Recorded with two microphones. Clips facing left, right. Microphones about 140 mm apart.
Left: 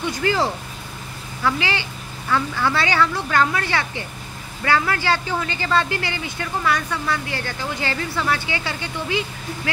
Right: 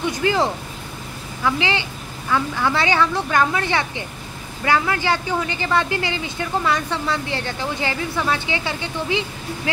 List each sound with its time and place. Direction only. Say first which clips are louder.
0.0 s speech: right 1 dB; 20° right (ahead or behind)